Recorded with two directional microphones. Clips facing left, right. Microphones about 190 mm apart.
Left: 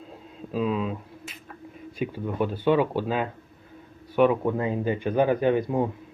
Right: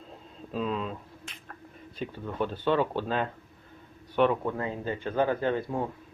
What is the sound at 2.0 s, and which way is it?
A man's voice, 10° left (ahead or behind).